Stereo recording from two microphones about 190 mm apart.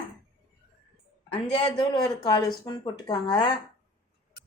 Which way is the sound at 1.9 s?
20° left (ahead or behind).